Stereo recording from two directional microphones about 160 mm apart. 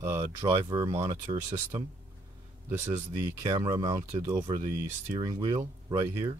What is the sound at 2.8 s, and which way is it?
Speech, 15° right (ahead or behind).